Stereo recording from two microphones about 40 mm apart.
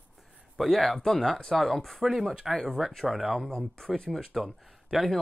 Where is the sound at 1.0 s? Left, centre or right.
Centre.